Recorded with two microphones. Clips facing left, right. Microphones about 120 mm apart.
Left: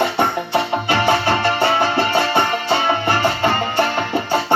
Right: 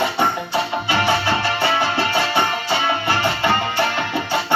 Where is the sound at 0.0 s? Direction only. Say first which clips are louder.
Left 2 dB; 55° left (ahead or behind).